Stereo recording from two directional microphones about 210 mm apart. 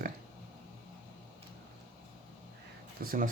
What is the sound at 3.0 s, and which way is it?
Speech, 45° right (ahead or behind).